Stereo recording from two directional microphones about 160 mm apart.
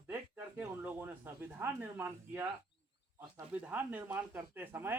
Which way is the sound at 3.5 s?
10° right (ahead or behind).